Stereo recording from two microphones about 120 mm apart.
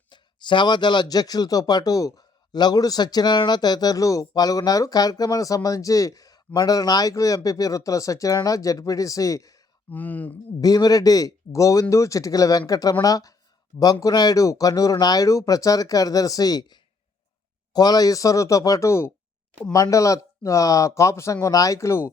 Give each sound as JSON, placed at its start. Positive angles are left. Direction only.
{"t": 0.1, "sound": "speech", "side_deg": 40}
{"t": 9.9, "sound": "speech", "side_deg": 15}
{"t": 10.6, "sound": "speech", "side_deg": 30}